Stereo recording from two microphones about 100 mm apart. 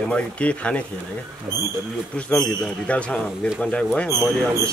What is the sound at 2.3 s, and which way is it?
A man's voice, 10° left (ahead or behind).